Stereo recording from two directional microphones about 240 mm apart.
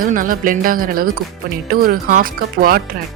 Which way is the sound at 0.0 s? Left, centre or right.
Right.